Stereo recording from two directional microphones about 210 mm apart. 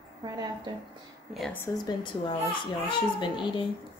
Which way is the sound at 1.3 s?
Centre (ahead or behind).